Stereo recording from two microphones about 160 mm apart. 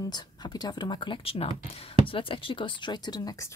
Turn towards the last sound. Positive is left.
turn(degrees=25)  # may be behind; listen again after turning